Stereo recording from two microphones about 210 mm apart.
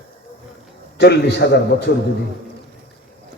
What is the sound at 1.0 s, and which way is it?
Speech, 50° left (ahead or behind).